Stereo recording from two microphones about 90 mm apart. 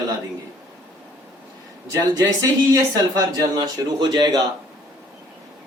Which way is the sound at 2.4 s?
40° right (ahead or behind).